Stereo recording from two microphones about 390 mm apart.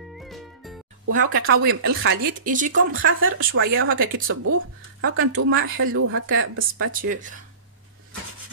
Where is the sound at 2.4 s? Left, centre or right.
Centre.